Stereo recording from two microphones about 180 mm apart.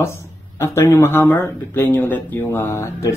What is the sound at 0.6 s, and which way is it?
Speech, 15° left (ahead or behind).